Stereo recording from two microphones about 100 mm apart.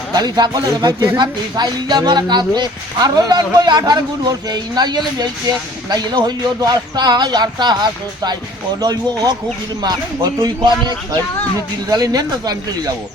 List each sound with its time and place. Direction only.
0.1 s a man's voice: 45° right (ahead or behind)
1.2 s a man's voice: 45° right (ahead or behind)